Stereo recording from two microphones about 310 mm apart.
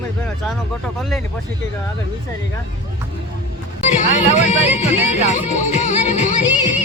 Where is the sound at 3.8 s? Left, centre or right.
Left.